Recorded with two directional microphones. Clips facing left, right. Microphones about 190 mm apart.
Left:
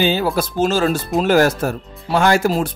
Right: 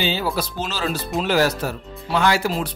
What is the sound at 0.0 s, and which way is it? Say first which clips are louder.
Speech: left 6 dB; 50° left (ahead or behind).